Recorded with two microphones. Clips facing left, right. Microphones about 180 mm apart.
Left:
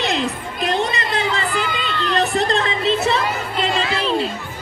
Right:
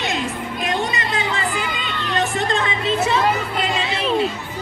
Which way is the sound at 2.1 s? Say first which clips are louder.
Left 2 dB; 35° left (ahead or behind).